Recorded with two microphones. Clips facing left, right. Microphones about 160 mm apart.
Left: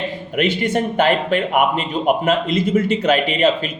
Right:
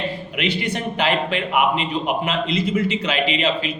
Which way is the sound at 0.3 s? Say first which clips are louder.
Left 7 dB; 50° left (ahead or behind).